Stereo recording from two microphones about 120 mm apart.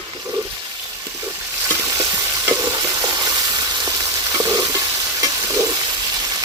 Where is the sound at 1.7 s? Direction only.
25° right (ahead or behind).